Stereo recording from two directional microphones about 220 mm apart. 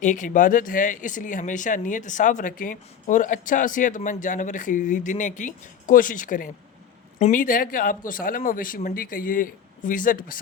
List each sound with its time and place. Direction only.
0.0 s speech: 35° left (ahead or behind)